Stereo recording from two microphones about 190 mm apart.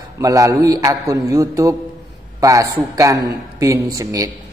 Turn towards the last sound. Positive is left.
turn(degrees=-20)  # may be behind; listen again after turning